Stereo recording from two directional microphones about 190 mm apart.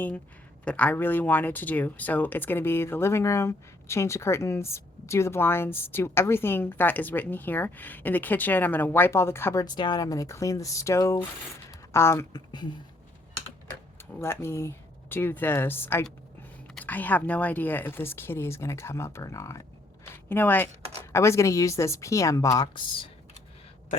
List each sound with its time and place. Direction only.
0.6 s speech: 5° left (ahead or behind); by 12.6 s 20° left (ahead or behind)
14.2 s speech: 15° left (ahead or behind)